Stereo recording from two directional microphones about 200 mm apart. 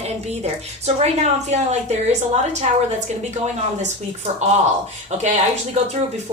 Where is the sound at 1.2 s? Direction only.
35° right (ahead or behind).